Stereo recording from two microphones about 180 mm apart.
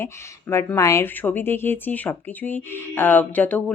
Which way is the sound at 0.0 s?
15° left (ahead or behind).